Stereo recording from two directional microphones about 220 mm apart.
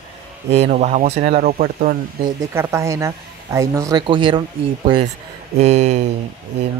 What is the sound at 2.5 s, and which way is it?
Speech, 10° right (ahead or behind).